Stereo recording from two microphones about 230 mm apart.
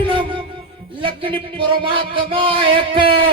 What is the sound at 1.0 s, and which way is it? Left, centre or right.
Music, right.